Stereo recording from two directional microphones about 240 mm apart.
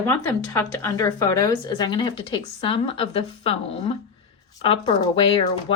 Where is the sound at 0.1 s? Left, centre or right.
Centre.